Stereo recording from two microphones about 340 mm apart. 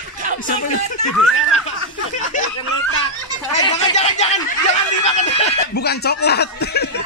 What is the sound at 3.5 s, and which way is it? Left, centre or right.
Speech, centre.